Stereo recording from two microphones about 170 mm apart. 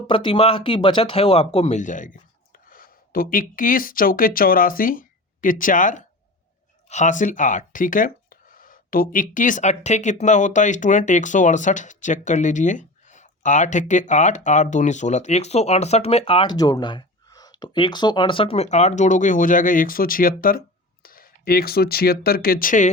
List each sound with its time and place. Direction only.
0.1 s speech: 30° left (ahead or behind); by 22.9 s 50° left (ahead or behind)